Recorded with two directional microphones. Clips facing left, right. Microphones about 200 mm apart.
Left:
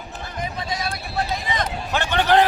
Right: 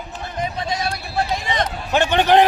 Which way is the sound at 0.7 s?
25° right (ahead or behind).